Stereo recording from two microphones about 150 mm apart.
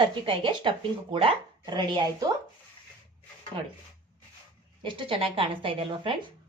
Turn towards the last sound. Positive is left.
turn(degrees=-35)  # may be behind; listen again after turning